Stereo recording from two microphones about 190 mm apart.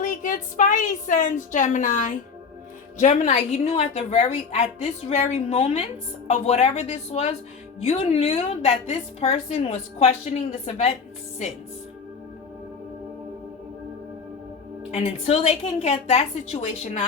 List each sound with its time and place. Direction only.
0.0 s a woman's voice: 45° left (ahead or behind)
14.8 s a woman's voice: 35° left (ahead or behind)